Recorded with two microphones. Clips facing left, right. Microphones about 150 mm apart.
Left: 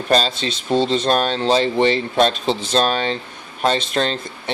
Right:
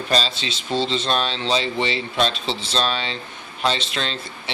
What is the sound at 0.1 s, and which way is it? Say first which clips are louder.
Speech: left 6 dB; 50° left (ahead or behind).